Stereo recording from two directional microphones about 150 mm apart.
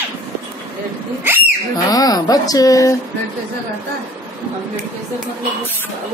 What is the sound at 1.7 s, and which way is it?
Speech, 25° left (ahead or behind).